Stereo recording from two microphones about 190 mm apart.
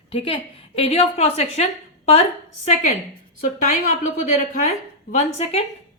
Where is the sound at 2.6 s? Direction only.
40° left (ahead or behind).